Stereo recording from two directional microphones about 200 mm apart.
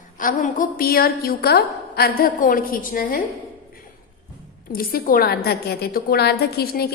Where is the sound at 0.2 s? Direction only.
40° left (ahead or behind).